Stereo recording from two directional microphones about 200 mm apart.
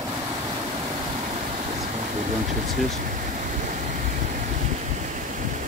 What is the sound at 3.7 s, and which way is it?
Waves, 40° right (ahead or behind).